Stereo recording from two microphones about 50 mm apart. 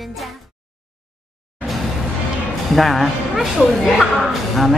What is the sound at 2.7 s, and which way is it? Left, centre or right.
A woman's voice, centre.